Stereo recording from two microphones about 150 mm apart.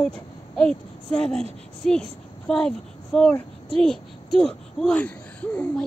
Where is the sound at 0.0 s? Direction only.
5° left (ahead or behind).